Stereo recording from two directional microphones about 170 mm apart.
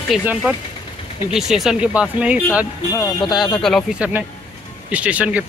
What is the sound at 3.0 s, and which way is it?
Speech, 20° left (ahead or behind).